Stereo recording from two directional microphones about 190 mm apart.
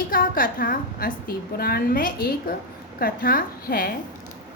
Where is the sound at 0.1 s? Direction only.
45° left (ahead or behind).